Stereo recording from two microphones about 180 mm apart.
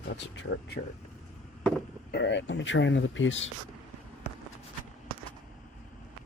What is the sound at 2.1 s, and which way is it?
Speech, 80° left.